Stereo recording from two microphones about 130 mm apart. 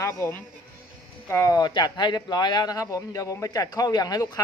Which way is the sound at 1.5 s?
35° left (ahead or behind).